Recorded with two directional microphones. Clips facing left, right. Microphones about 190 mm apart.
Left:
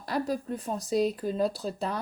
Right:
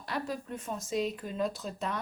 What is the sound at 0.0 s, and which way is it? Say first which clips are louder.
A woman's voice: left 6 dB; 40° left (ahead or behind).